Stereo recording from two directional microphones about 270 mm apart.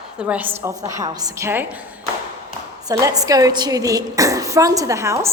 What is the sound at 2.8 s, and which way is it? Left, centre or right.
A woman's voice, centre.